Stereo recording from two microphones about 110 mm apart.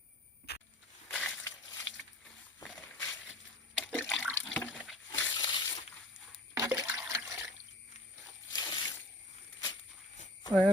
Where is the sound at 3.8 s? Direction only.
10° left (ahead or behind).